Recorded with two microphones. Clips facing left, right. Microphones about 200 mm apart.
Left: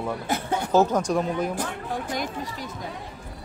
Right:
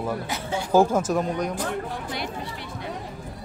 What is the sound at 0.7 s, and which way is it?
Speech, 10° right (ahead or behind).